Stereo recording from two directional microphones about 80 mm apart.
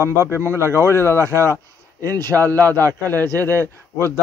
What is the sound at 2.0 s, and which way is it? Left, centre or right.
A man's voice, right.